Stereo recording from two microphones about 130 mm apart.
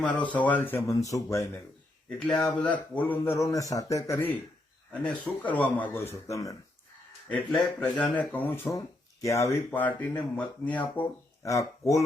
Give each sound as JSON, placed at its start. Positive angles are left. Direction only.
{"t": 0.3, "sound": "speech", "side_deg": 10}
{"t": 2.0, "sound": "speech", "side_deg": 5}
{"t": 3.5, "sound": "speech", "side_deg": 25}
{"t": 7.3, "sound": "speech", "side_deg": 5}
{"t": 11.4, "sound": "speech", "side_deg": 25}